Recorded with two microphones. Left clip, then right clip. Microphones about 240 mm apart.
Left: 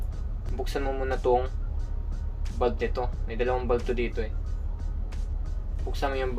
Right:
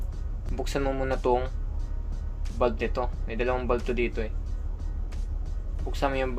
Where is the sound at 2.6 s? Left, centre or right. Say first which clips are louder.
Right 1 dB; right.